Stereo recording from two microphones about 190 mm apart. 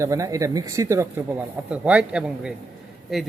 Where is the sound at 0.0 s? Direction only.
15° right (ahead or behind).